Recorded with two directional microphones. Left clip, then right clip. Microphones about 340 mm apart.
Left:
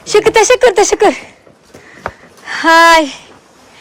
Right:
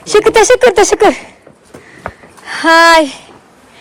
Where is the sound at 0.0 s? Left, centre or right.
Centre.